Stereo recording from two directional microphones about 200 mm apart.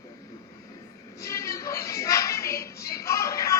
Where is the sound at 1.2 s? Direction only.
15° left (ahead or behind).